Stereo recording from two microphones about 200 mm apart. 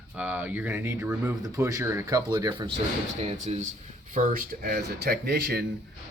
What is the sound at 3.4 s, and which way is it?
Speech, 35° right (ahead or behind).